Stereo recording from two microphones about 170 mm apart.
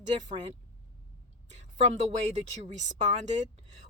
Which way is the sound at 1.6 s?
40° right (ahead or behind).